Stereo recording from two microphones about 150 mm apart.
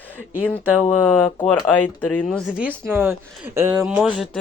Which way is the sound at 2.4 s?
5° right (ahead or behind).